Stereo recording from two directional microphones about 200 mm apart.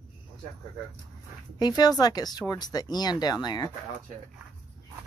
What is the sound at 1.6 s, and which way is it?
Speech, 20° left (ahead or behind).